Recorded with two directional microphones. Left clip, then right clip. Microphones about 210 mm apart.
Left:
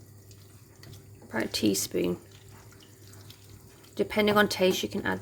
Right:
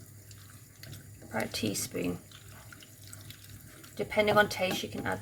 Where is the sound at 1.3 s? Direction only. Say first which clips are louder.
Left 5 dB; 55° left (ahead or behind).